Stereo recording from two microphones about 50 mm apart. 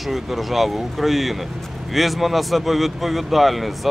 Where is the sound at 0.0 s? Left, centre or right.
Centre.